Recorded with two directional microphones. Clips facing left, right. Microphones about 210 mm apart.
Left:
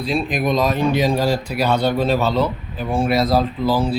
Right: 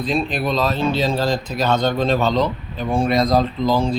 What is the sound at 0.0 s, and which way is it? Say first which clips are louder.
Speech: left 1 dB; 5° left (ahead or behind).